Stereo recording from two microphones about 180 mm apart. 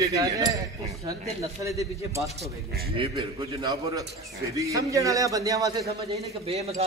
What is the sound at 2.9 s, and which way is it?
A man's voice, 30° right (ahead or behind).